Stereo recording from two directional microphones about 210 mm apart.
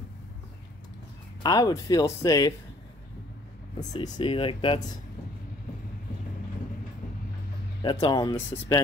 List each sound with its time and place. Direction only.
1.4 s speech: 15° left (ahead or behind)
4.0 s speech: 25° left (ahead or behind)
7.8 s speech: 20° left (ahead or behind)